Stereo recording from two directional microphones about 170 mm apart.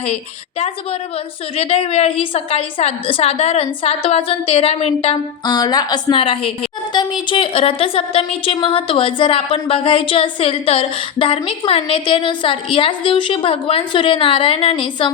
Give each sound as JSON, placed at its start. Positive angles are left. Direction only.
{"t": 1.5, "sound": "a woman's voice", "side_deg": 35}
{"t": 5.5, "sound": "a woman's voice", "side_deg": 20}